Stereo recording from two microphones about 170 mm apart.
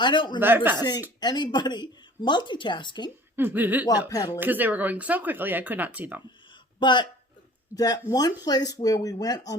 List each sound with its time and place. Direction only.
0.0 s speech: 25° left (ahead or behind)
0.3 s speech: 10° right (ahead or behind)
0.8 s speech: 25° left (ahead or behind)
3.3 s speech: 10° right (ahead or behind)
4.1 s speech: 20° left (ahead or behind)
4.4 s speech: 10° right (ahead or behind)
6.5 s a sound: 25° left (ahead or behind)
7.7 s speech: 10° right (ahead or behind)
8.4 s speech: 25° left (ahead or behind)